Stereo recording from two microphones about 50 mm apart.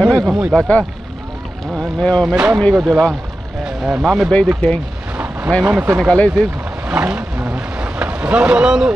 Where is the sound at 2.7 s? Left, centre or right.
Right.